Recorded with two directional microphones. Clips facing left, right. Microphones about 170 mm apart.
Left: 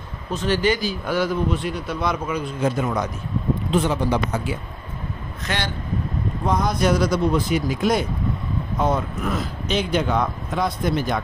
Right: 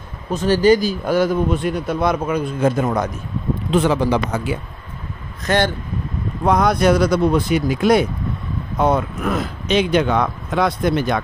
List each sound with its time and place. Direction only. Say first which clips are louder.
0.3 s a man's voice: right 7 dB; 40° right (ahead or behind)
3.7 s speech: right 5 dB; 90° right
5.5 s a man's voice: right 10 dB; 45° right (ahead or behind)
6.4 s speech: right 6 dB; 70° right (ahead or behind)